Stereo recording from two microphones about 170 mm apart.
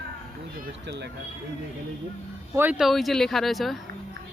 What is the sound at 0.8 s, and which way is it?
Speech, 90° right.